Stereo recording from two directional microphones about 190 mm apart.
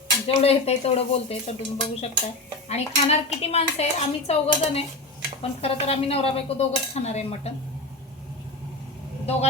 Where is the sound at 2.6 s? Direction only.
35° left (ahead or behind).